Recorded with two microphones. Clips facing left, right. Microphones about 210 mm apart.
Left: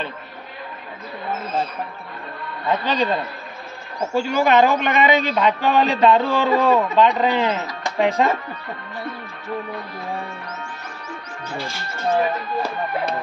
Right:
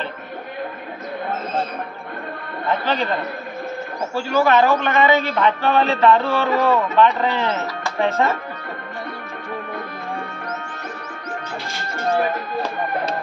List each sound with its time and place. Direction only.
2.7 s a man's voice: 15° left (ahead or behind)